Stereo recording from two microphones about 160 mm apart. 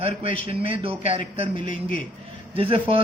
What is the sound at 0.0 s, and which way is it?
A man's voice, 35° right (ahead or behind).